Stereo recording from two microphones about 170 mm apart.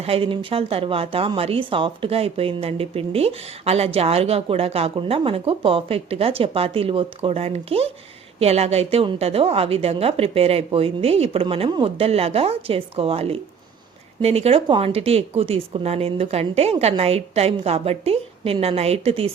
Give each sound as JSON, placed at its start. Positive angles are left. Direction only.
{"t": 0.0, "sound": "a woman's voice", "side_deg": -35}